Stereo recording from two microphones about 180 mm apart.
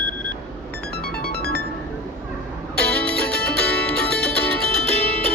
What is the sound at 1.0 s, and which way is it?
Music, 60° left (ahead or behind).